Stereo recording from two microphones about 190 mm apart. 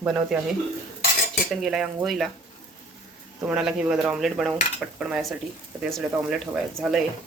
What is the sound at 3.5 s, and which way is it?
Cutlery, 5° right (ahead or behind).